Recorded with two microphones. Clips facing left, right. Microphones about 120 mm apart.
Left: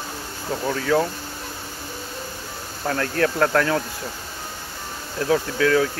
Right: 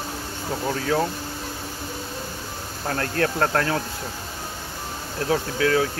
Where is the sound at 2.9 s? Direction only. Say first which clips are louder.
Left 2 dB; 35° right (ahead or behind).